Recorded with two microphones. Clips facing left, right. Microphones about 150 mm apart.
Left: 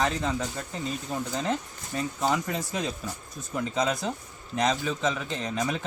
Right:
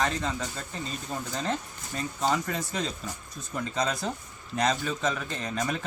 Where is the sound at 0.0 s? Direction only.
20° left (ahead or behind).